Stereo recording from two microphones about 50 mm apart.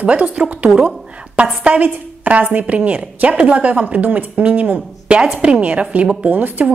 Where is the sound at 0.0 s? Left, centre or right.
Right.